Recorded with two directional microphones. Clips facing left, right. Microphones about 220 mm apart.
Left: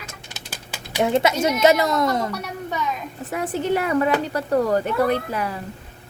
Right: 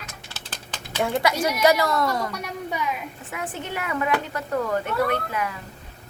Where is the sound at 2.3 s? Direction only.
10° right (ahead or behind).